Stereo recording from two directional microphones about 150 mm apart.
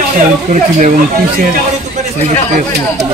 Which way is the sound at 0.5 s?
55° right (ahead or behind).